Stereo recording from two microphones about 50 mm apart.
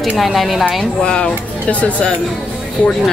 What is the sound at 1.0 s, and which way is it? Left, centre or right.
Speech, centre.